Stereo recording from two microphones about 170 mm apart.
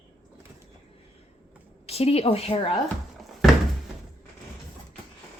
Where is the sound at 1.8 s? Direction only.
35° left (ahead or behind).